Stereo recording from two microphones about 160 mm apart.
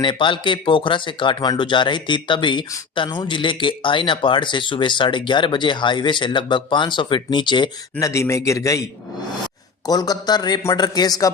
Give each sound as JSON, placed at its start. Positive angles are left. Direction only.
{"t": 0.0, "sound": "speech", "side_deg": 30}
{"t": 8.1, "sound": "speech", "side_deg": 20}
{"t": 9.8, "sound": "speech", "side_deg": 25}